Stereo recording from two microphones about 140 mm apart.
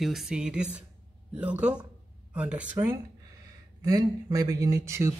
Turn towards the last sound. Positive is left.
turn(degrees=-20)  # may be behind; listen again after turning